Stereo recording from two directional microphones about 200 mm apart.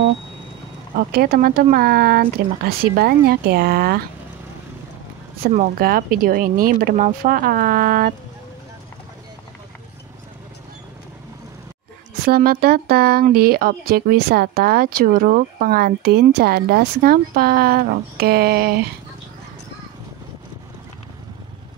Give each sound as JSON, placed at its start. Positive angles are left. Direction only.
{"t": 0.9, "sound": "speech", "side_deg": -50}
{"t": 5.5, "sound": "speech", "side_deg": -45}
{"t": 12.3, "sound": "speech", "side_deg": -50}